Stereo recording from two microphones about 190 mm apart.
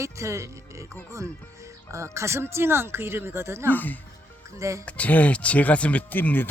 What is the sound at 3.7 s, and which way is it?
Speech, 10° left (ahead or behind).